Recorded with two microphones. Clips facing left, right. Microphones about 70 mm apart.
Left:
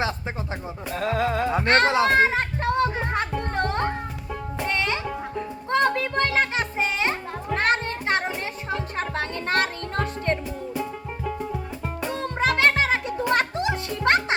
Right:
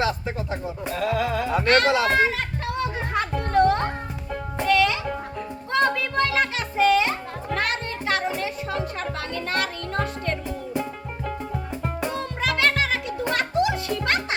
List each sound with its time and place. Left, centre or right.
0.9 s speech: left
4.6 s music: left
12.1 s music: left